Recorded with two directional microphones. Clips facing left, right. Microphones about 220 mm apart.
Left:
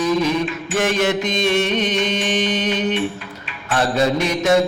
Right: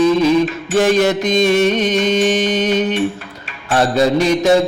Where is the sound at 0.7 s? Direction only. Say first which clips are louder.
Right 5 dB; 35° right (ahead or behind).